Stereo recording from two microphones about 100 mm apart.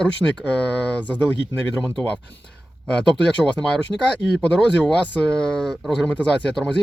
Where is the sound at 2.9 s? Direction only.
10° left (ahead or behind).